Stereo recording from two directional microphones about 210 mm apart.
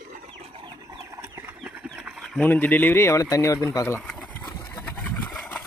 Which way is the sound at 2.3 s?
10° left (ahead or behind).